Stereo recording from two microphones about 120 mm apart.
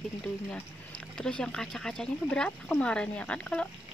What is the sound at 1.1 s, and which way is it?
Speech, 5° left (ahead or behind).